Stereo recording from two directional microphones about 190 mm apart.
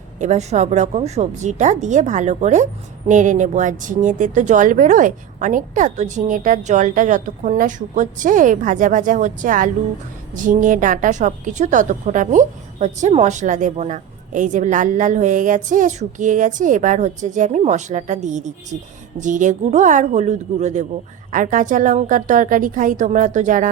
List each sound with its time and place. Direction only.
0.2 s a woman's voice: 35° right (ahead or behind)